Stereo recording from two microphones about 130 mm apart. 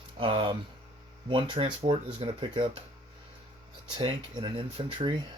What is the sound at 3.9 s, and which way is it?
Speech, 45° right (ahead or behind).